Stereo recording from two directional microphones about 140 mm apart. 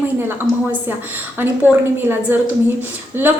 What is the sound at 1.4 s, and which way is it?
A woman's voice, 15° right (ahead or behind).